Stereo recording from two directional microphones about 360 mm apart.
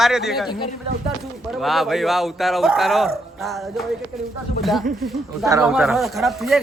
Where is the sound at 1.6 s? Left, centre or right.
Centre.